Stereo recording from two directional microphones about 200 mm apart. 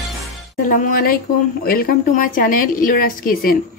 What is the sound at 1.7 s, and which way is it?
A woman's voice, 45° left (ahead or behind).